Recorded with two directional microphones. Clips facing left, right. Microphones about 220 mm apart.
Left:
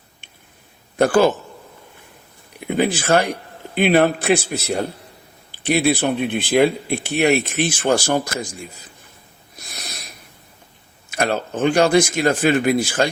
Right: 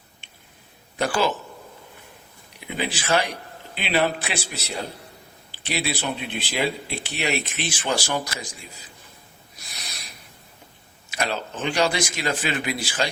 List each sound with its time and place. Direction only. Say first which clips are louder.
0.9 s speech: left 9 dB; 50° left (ahead or behind)
2.6 s speech: left 10 dB; 50° left (ahead or behind)
9.6 s a sound: left 6 dB; 50° left (ahead or behind)
11.1 s speech: left 7 dB; 50° left (ahead or behind)